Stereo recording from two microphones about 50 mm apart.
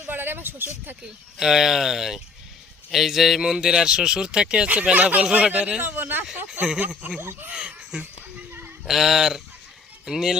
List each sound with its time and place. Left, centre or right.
0.1 s speech: right
1.4 s speech: centre; by 5.8 s right
5.8 s speech: right
6.7 s speech: right
8.9 s speech: centre